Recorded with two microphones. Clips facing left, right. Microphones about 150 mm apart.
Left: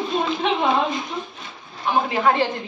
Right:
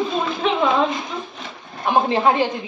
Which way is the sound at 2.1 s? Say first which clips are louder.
Right 1 dB; 25° right (ahead or behind).